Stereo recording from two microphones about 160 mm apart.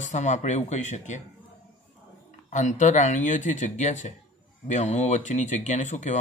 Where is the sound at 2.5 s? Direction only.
50° left (ahead or behind).